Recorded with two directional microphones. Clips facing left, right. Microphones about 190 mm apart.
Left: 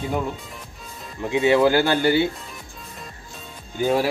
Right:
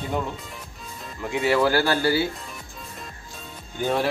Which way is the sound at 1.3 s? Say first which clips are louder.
Left 4 dB; 20° left (ahead or behind).